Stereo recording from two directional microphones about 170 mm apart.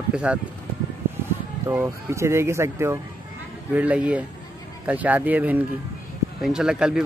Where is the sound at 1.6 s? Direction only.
15° right (ahead or behind).